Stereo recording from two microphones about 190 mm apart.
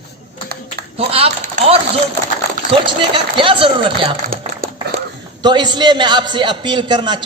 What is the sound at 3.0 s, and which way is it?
A man's voice, 25° right (ahead or behind).